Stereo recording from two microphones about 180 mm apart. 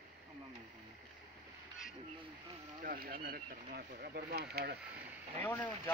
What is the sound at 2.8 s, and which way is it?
Speech, 55° right (ahead or behind).